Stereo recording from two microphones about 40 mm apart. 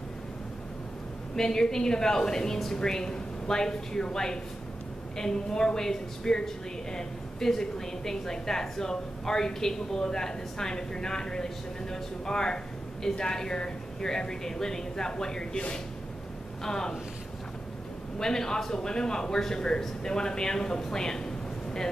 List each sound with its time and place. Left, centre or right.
1.3 s a woman's voice: centre
16.6 s a woman's voice: centre
18.2 s a woman's voice: centre